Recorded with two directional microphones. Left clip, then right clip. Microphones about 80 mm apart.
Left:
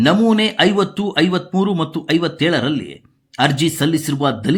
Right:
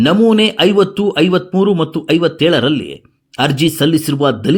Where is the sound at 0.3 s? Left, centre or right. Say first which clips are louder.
Right 4 dB; right.